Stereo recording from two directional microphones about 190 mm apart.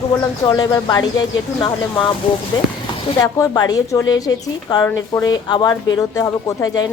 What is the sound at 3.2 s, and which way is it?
A woman's voice, 15° left (ahead or behind).